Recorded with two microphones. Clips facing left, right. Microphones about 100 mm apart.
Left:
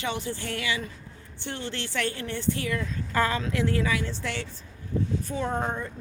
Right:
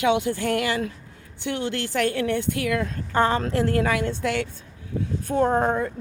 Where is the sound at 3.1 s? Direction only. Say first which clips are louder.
Right 5 dB; 30° right (ahead or behind).